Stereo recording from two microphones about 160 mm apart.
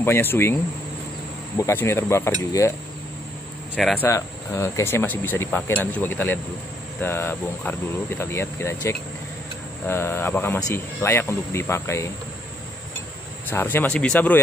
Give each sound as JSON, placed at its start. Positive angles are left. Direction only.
{"t": 0.0, "sound": "speech", "side_deg": 15}
{"t": 1.6, "sound": "speech", "side_deg": 15}
{"t": 3.7, "sound": "speech", "side_deg": 10}
{"t": 13.5, "sound": "speech", "side_deg": 15}